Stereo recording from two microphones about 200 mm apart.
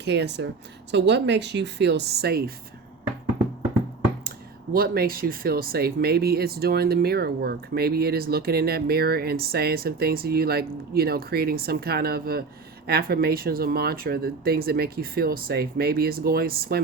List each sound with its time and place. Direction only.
0.0 s speech: 60° right (ahead or behind)
4.7 s speech: 50° right (ahead or behind)